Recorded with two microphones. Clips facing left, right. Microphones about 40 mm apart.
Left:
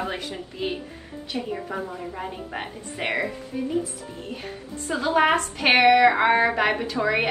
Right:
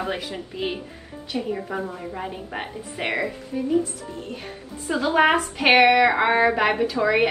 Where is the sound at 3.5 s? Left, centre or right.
Centre.